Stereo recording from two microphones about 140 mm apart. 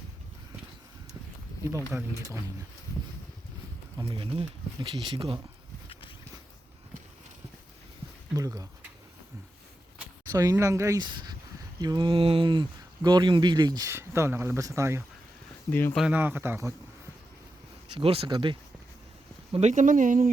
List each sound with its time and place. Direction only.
1.9 s a man's voice: 15° right (ahead or behind)
3.9 s speech: 35° right (ahead or behind)
5.9 s a sound: 40° left (ahead or behind)
8.4 s speech: 25° right (ahead or behind)
10.2 s speech: 20° right (ahead or behind)
13.9 s speech: 20° right (ahead or behind)
15.7 s speech: 15° left (ahead or behind)
16.0 s a man's voice: 10° right (ahead or behind)
17.9 s speech: 40° right (ahead or behind)
19.5 s speech: 55° right (ahead or behind)